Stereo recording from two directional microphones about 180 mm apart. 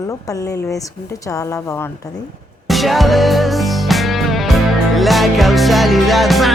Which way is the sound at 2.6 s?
Centre (ahead or behind).